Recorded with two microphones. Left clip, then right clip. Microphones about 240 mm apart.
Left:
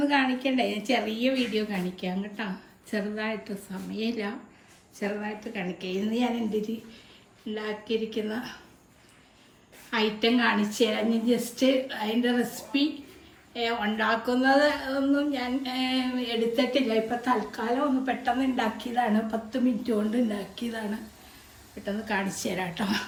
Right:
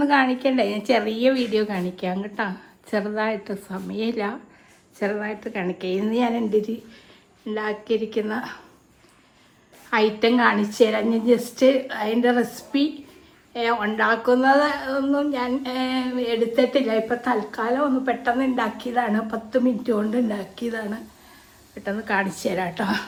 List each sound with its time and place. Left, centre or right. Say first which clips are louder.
0.0 s a woman's voice: right 6 dB; right
5.5 s a woman's voice: right 7 dB; right
6.5 s speech: right 8 dB; centre
9.9 s a woman's voice: right 6 dB; centre
22.3 s a woman's voice: right 6 dB; right